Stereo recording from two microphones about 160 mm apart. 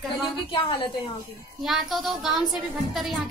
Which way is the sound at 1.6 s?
Centre (ahead or behind).